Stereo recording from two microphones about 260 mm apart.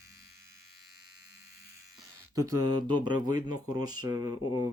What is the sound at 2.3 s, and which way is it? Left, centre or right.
Speech, centre.